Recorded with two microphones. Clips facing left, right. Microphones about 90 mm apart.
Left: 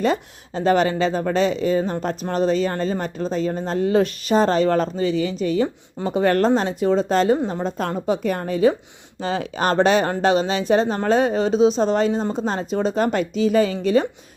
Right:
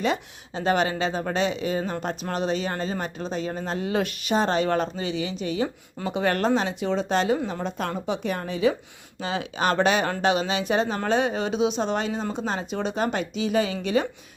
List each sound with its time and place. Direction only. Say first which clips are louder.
0.0 s a woman's voice: left 5 dB; 40° left (ahead or behind)